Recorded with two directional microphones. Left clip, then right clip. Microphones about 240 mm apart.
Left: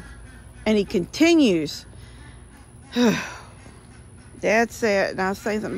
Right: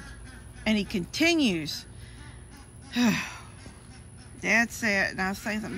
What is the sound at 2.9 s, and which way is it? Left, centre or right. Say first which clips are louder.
Speech: left 6 dB; left.